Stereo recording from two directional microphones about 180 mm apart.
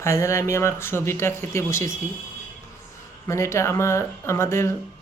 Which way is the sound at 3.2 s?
15° left (ahead or behind).